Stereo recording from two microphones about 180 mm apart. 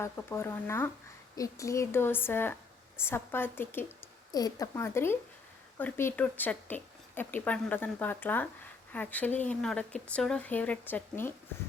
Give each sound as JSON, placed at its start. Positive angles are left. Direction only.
{"t": 0.0, "sound": "speech", "side_deg": 15}